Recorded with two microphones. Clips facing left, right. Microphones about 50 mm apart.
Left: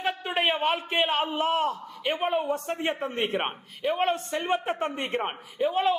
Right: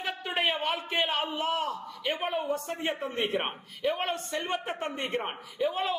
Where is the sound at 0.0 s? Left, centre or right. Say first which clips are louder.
Left 3 dB; left.